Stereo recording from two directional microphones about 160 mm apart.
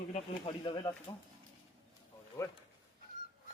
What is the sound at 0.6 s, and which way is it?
Speech, 30° left (ahead or behind).